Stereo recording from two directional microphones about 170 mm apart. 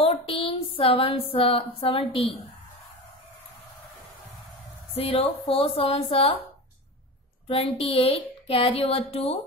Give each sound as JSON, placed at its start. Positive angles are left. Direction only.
{"t": 0.0, "sound": "a woman's voice", "side_deg": 30}
{"t": 4.9, "sound": "a woman's voice", "side_deg": 35}
{"t": 7.4, "sound": "a woman's voice", "side_deg": 35}